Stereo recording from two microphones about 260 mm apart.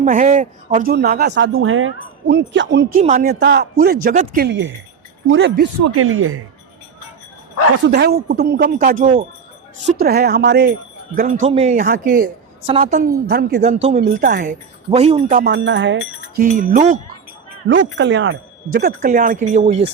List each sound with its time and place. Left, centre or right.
0.0 s a man's voice: right
3.0 s a man's voice: right
4.0 s a man's voice: right
5.8 s speech: right
7.9 s a man's voice: right
11.1 s a man's voice: right
12.6 s a man's voice: right
14.0 s a man's voice: right
14.8 s a man's voice: right
15.5 s a man's voice: right
17.7 s a man's voice: right